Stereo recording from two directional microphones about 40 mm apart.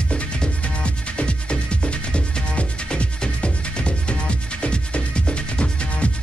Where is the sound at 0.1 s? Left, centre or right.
Left.